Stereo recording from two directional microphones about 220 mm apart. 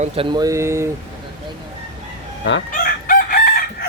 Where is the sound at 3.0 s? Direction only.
40° left (ahead or behind).